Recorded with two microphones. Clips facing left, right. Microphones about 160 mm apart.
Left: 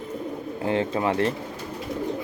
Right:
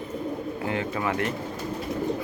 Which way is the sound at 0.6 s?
25° left (ahead or behind).